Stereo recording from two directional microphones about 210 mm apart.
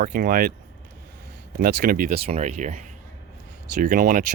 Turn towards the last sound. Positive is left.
turn(degrees=-40)  # may be behind; listen again after turning